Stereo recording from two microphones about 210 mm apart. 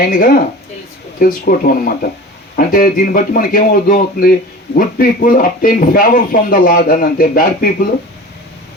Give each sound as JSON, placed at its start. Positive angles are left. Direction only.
{"t": 0.0, "sound": "a man's voice", "side_deg": 45}